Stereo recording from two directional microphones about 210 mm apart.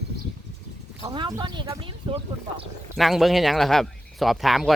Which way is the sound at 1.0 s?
20° right (ahead or behind).